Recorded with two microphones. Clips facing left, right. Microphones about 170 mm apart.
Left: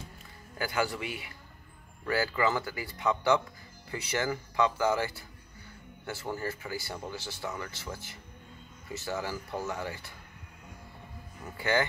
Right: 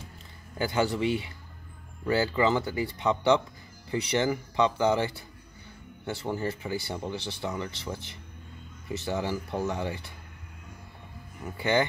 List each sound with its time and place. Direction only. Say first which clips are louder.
0.6 s speech: right 5 dB; 25° right (ahead or behind)
11.5 s speech: right 3 dB; 20° right (ahead or behind)